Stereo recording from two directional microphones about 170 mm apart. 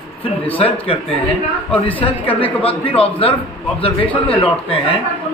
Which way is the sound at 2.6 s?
35° left (ahead or behind).